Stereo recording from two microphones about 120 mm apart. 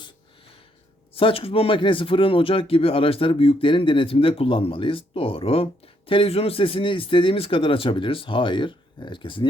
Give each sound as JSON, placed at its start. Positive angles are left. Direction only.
{"t": 1.1, "sound": "speech", "side_deg": 50}